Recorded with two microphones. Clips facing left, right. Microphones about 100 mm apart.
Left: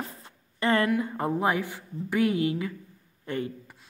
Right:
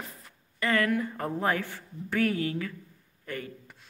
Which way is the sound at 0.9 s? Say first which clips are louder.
Left 3 dB; 15° left (ahead or behind).